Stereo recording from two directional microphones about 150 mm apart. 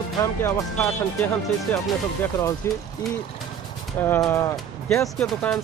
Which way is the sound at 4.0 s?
20° left (ahead or behind).